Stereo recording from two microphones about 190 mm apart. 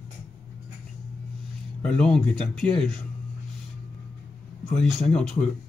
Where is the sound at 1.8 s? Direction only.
5° left (ahead or behind).